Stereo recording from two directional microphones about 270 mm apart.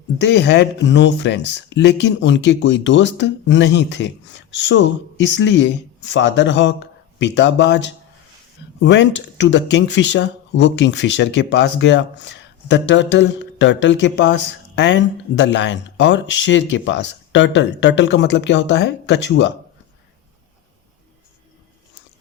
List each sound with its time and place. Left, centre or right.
0.2 s speech: left